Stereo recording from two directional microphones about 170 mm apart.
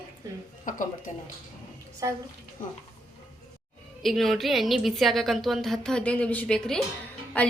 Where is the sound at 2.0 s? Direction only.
20° right (ahead or behind).